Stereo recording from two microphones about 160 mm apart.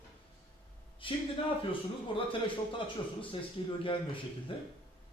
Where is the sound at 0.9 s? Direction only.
30° left (ahead or behind).